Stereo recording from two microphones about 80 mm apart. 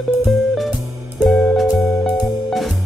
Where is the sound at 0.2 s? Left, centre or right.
Centre.